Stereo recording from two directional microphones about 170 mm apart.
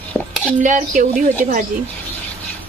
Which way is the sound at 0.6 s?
50° right (ahead or behind).